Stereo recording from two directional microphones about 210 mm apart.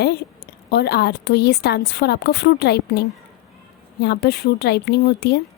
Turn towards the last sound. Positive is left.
turn(degrees=50)  # may be behind; listen again after turning